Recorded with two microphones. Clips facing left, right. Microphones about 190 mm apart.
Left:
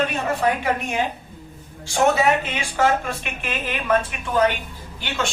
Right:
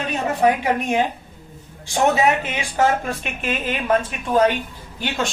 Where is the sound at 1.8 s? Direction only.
15° right (ahead or behind).